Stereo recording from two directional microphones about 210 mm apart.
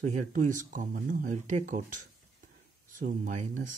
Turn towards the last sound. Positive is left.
turn(degrees=-35)  # may be behind; listen again after turning